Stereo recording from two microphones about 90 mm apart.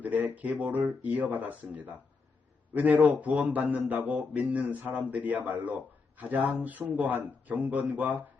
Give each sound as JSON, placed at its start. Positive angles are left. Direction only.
{"t": 0.0, "sound": "a man's voice", "side_deg": -20}